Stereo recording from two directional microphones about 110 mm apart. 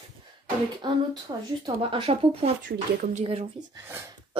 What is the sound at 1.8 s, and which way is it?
Speech, 55° right (ahead or behind).